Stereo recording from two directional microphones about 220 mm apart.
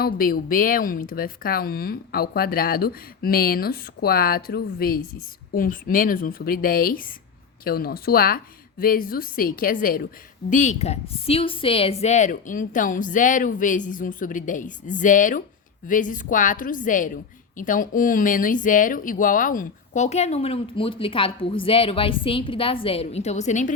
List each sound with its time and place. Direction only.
0.0 s speech: 40° left (ahead or behind)